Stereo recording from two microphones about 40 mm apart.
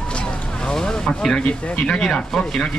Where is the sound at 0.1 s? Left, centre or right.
Left.